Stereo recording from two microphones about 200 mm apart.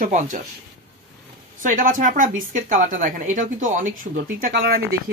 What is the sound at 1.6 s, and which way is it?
A woman's voice, 45° right (ahead or behind).